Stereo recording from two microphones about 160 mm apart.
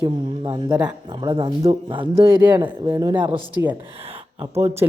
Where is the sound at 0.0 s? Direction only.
25° right (ahead or behind).